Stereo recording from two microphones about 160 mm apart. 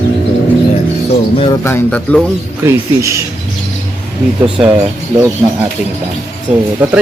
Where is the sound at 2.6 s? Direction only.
15° right (ahead or behind).